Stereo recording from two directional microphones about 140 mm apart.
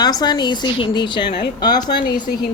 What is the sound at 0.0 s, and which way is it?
A woman's voice, 30° left (ahead or behind).